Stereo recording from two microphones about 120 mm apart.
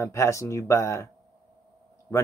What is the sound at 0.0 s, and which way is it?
Speech, 25° left (ahead or behind).